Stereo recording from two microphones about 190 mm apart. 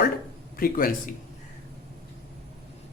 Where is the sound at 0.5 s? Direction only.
50° left (ahead or behind).